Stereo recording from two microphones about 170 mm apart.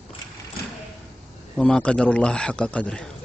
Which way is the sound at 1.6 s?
5° left (ahead or behind).